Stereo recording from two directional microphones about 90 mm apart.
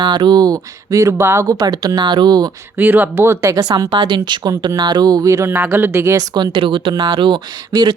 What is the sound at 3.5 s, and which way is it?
Speech, 50° right (ahead or behind).